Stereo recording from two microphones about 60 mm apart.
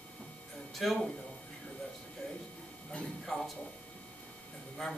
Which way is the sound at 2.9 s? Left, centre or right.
Left.